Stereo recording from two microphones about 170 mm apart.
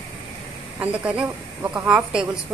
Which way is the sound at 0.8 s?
10° right (ahead or behind).